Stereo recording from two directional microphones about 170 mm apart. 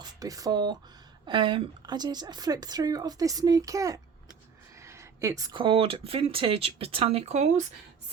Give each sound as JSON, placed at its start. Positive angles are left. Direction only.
{"t": 0.0, "sound": "speech", "side_deg": -20}